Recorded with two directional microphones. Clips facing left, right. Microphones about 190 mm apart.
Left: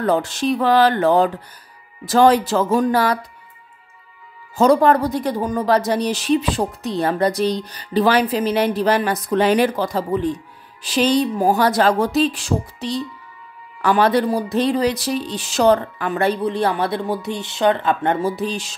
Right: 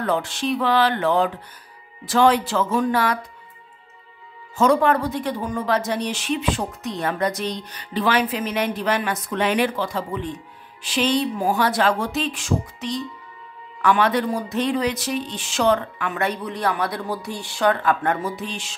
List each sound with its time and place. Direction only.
0.0 s a woman's voice: 40° left (ahead or behind)
4.6 s a woman's voice: 35° left (ahead or behind)